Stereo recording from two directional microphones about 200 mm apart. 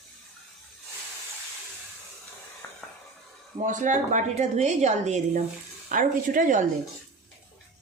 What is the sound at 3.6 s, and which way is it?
A woman's voice, 40° right (ahead or behind).